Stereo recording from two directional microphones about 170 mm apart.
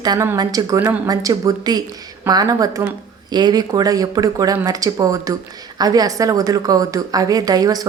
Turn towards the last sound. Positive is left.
turn(degrees=-20)  # may be behind; listen again after turning